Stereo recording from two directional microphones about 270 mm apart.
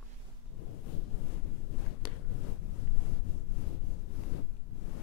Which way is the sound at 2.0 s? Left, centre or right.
Left.